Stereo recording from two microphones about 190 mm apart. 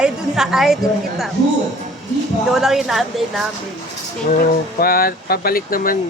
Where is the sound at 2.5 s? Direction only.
Centre (ahead or behind).